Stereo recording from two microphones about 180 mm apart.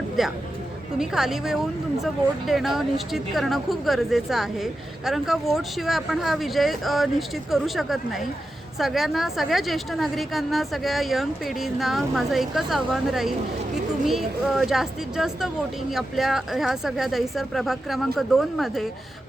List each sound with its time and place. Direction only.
0.2 s speech: centre (ahead or behind)